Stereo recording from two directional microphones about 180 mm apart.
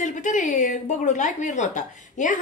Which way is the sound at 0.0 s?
45° left (ahead or behind).